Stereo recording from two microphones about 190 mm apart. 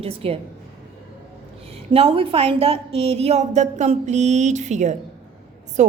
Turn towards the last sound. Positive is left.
turn(degrees=-40)  # may be behind; listen again after turning